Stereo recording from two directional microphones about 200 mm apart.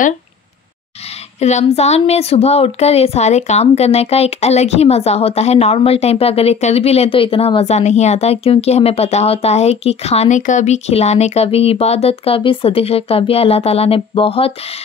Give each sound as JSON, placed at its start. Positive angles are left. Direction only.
{"t": 1.0, "sound": "speech", "side_deg": 35}